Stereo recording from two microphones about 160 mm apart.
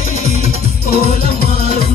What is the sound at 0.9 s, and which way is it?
Music, 40° right (ahead or behind).